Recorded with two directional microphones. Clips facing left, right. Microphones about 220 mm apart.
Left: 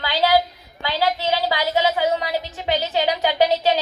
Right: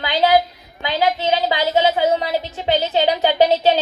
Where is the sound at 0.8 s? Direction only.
15° right (ahead or behind).